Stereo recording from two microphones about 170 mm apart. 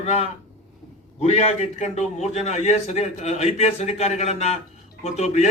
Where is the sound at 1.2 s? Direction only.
40° left (ahead or behind).